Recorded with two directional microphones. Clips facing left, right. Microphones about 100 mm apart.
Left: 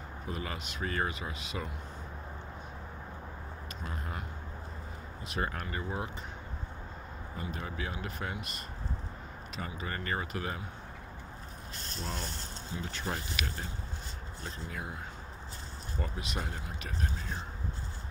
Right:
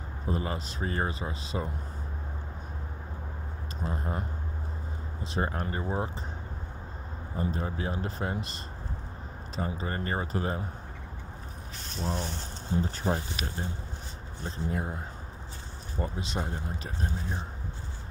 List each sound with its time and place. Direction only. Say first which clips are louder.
0.3 s speech: right 7 dB; 30° right (ahead or behind)
3.8 s speech: right 8 dB; 35° right (ahead or behind)
7.3 s speech: right 7 dB; 30° right (ahead or behind)
9.6 s speech: right 6 dB; 30° right (ahead or behind)
12.8 s speech: right 7 dB; 30° right (ahead or behind)
16.0 s speech: right 5 dB; 25° right (ahead or behind)